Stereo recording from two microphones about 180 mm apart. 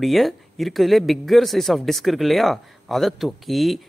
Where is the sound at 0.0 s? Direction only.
Centre (ahead or behind).